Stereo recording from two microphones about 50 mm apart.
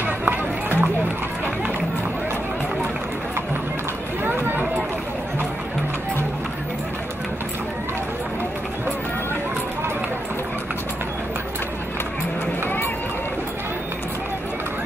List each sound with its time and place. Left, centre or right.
0.3 s run: right